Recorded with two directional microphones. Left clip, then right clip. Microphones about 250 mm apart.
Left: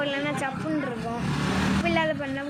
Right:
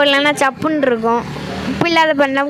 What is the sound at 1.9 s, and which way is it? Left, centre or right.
Speech, right.